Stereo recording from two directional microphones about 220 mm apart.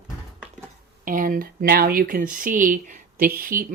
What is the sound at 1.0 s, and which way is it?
Speech, 35° right (ahead or behind).